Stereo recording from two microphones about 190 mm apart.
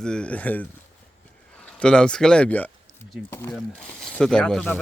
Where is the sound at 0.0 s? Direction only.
5° left (ahead or behind).